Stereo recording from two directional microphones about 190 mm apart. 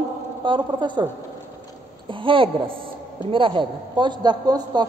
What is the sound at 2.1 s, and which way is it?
A man's voice, 25° right (ahead or behind).